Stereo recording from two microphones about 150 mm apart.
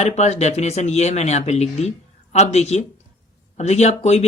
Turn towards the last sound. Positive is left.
turn(degrees=45)  # may be behind; listen again after turning